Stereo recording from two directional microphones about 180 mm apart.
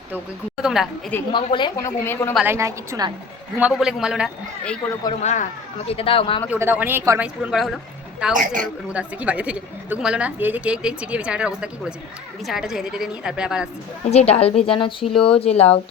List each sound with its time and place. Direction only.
0.6 s a woman's voice: centre (ahead or behind)
1.3 s a woman's voice: 25° left (ahead or behind)
2.3 s a woman's voice: 10° right (ahead or behind)
3.6 s a woman's voice: 5° right (ahead or behind)
5.2 s a woman's voice: 40° left (ahead or behind)
6.5 s a woman's voice: 10° right (ahead or behind)
14.1 s a woman's voice: 35° left (ahead or behind)